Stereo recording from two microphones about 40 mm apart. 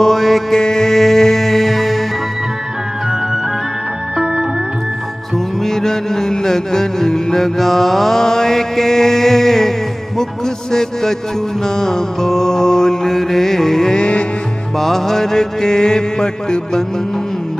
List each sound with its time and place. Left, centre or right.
0.0 s mantra: centre
0.6 s music: centre
5.6 s music: centre
11.6 s mantra: centre
13.9 s music: left
14.8 s mantra: centre